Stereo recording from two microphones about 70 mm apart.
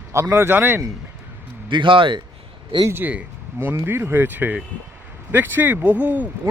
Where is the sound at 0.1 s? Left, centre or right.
Right.